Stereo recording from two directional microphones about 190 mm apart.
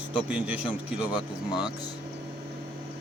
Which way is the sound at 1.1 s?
20° left (ahead or behind).